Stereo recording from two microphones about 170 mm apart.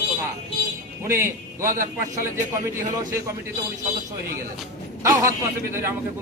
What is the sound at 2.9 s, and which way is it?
Speech, 20° right (ahead or behind).